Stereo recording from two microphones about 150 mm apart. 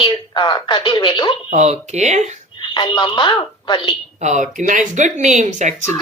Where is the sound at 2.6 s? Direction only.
30° left (ahead or behind).